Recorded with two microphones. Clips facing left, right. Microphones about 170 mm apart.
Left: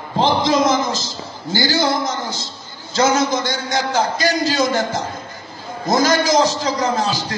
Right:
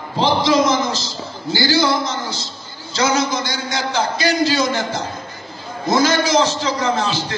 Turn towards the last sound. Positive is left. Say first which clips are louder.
# even
turn(degrees=40)  # may be behind; listen again after turning